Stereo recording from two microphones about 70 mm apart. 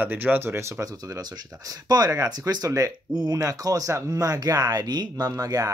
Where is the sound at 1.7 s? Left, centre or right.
Right.